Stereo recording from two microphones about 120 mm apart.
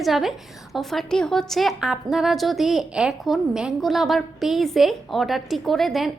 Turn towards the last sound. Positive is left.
turn(degrees=0)  # may be behind; listen again after turning